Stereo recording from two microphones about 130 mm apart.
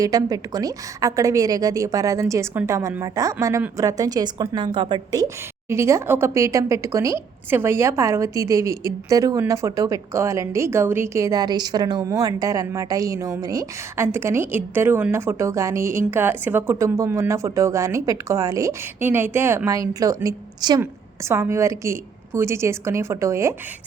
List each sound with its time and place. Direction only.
0.0 s a woman's voice: 30° right (ahead or behind)
21.2 s a woman's voice: 20° right (ahead or behind)